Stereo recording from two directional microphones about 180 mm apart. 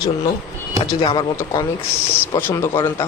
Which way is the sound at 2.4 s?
15° left (ahead or behind).